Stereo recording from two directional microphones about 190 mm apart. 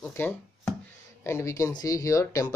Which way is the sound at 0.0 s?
10° left (ahead or behind).